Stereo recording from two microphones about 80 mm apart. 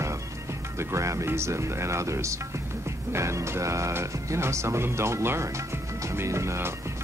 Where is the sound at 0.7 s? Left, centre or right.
Right.